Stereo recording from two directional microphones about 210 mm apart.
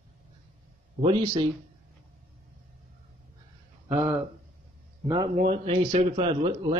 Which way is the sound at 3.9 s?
5° right (ahead or behind).